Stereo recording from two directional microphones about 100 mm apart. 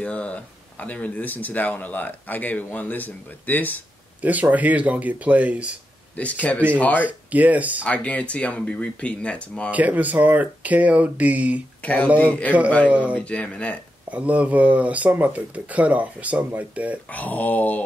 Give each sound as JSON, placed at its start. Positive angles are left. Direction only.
{"t": 0.0, "sound": "speech", "side_deg": 10}
{"t": 4.2, "sound": "speech", "side_deg": -15}
{"t": 6.1, "sound": "speech", "side_deg": 15}
{"t": 7.1, "sound": "speech", "side_deg": -15}
{"t": 7.8, "sound": "speech", "side_deg": 15}
{"t": 9.7, "sound": "speech", "side_deg": -15}
{"t": 11.8, "sound": "speech", "side_deg": 15}
{"t": 12.8, "sound": "speech", "side_deg": -15}
{"t": 13.2, "sound": "speech", "side_deg": 10}
{"t": 14.1, "sound": "speech", "side_deg": -15}
{"t": 17.1, "sound": "speech", "side_deg": 15}